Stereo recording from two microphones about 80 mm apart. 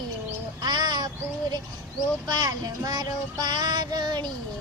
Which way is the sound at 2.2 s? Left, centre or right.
Right.